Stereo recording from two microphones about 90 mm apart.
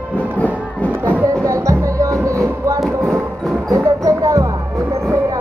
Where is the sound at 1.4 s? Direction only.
35° right (ahead or behind).